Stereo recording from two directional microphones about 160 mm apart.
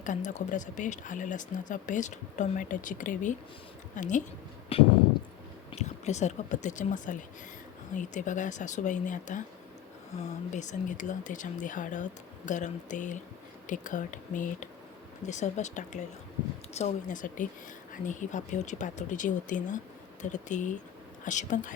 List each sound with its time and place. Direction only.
0.0 s speech: 50° left (ahead or behind)
4.7 s a sound: 35° left (ahead or behind)
5.7 s speech: 45° left (ahead or behind)